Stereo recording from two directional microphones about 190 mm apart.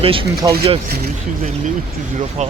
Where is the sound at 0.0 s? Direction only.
30° right (ahead or behind).